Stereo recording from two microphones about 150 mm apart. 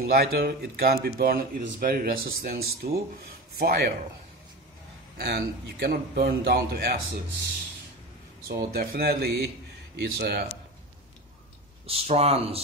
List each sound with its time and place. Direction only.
0.1 s a man's voice: 90° right
5.1 s speech: 90° right
8.5 s speech: 90° right
11.8 s speech: 40° right (ahead or behind)